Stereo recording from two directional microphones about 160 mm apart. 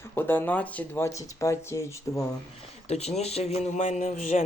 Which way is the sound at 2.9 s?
40° left (ahead or behind).